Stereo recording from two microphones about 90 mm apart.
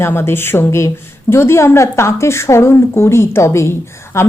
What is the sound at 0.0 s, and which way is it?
A woman's voice, 25° left (ahead or behind).